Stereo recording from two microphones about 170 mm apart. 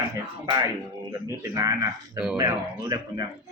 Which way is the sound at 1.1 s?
15° right (ahead or behind).